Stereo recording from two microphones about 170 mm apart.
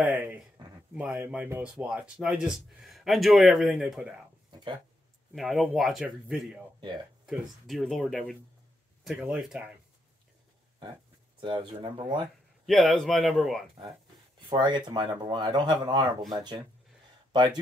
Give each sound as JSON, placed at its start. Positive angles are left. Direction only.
{"t": 0.0, "sound": "a man's voice", "side_deg": -10}
{"t": 5.3, "sound": "a man's voice", "side_deg": 0}
{"t": 9.0, "sound": "speech", "side_deg": -5}
{"t": 11.4, "sound": "speech", "side_deg": -30}
{"t": 12.6, "sound": "a man's voice", "side_deg": 0}
{"t": 14.5, "sound": "speech", "side_deg": -25}